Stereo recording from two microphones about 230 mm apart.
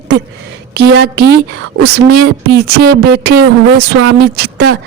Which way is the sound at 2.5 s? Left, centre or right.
Right.